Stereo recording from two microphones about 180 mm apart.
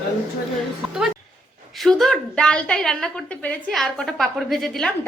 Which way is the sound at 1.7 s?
Centre (ahead or behind).